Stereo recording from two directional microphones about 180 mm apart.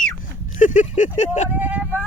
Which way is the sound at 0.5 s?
45° left (ahead or behind).